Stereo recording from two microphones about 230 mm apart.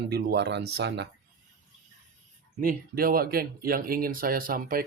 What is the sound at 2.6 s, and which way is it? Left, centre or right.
Speech, right.